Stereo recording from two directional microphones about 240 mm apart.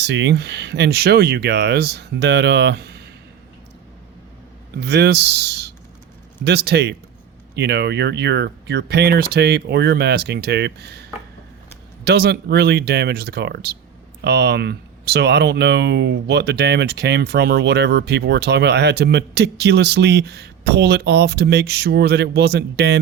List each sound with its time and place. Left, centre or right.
0.0 s speech: right
4.8 s speech: right